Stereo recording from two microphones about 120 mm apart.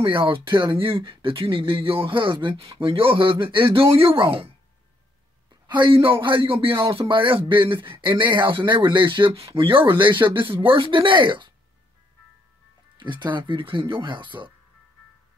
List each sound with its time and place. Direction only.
0.0 s a man's voice: 45° right (ahead or behind)
5.7 s a man's voice: 45° right (ahead or behind)
13.0 s a man's voice: 40° right (ahead or behind)